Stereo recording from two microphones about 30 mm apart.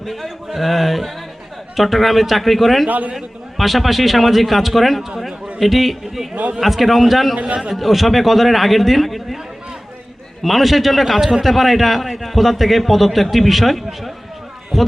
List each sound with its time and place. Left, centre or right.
0.0 s a man's voice: centre
7.3 s a man's voice: right
7.7 s a man's voice: centre
10.4 s a man's voice: centre